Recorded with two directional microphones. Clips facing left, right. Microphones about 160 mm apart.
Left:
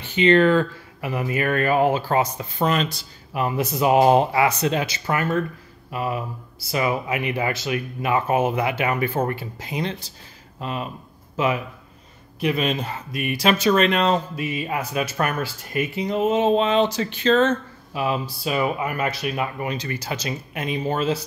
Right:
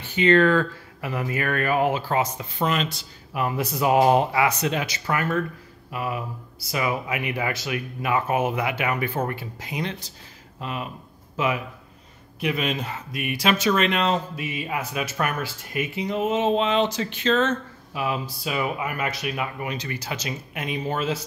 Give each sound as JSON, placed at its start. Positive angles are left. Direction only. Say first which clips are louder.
{"t": 0.0, "sound": "speech", "louder": "left 2 dB", "side_deg": 20}
{"t": 3.3, "sound": "speech", "louder": "left 2 dB", "side_deg": 25}